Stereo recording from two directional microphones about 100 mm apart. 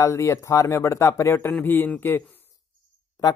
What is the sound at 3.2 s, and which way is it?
Speech, 40° left (ahead or behind).